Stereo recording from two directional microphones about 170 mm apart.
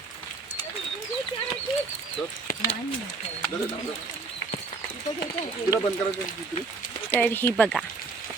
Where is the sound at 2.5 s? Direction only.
60° left (ahead or behind).